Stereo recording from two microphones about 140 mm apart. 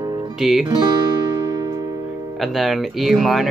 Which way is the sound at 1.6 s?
25° right (ahead or behind).